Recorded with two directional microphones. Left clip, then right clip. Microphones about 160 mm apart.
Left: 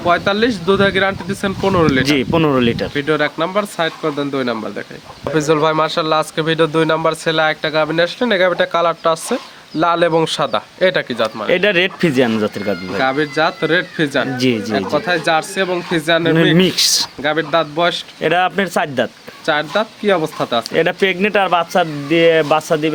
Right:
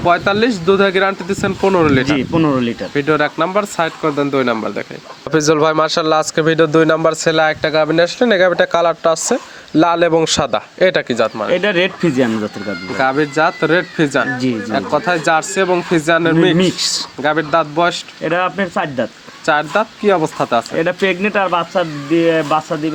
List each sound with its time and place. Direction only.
0.0 s speech: 15° right (ahead or behind)
2.0 s speech: 50° left (ahead or behind)
2.9 s speech: 15° right (ahead or behind)
5.2 s a man's voice: 55° right (ahead or behind); by 11.3 s 35° right (ahead or behind)
11.4 s speech: 30° left (ahead or behind)
13.0 s speech: 15° right (ahead or behind)
14.3 s speech: 35° left (ahead or behind)
14.7 s speech: 15° right (ahead or behind)
16.6 s speech: 40° left (ahead or behind)
17.2 s speech: 15° right (ahead or behind)
18.2 s speech: 45° left (ahead or behind)
19.5 s speech: 15° right (ahead or behind)
20.7 s speech: 35° left (ahead or behind)